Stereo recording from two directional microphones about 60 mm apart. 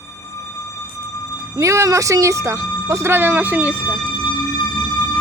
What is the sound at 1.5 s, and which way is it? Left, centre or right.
Speech, right.